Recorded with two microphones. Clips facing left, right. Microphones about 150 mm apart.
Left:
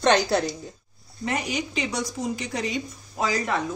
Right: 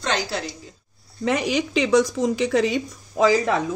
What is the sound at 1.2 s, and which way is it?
Speech, 90° right.